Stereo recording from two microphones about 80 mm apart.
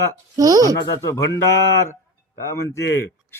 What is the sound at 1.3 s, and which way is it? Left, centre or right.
Speech, left.